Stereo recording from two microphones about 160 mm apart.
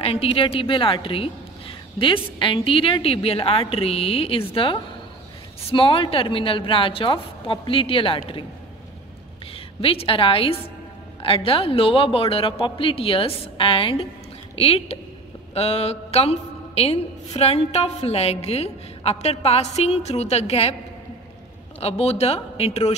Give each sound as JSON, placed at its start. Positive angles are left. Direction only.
{"t": 0.0, "sound": "a woman's voice", "side_deg": 35}
{"t": 9.8, "sound": "a woman's voice", "side_deg": 35}
{"t": 21.7, "sound": "a woman's voice", "side_deg": 40}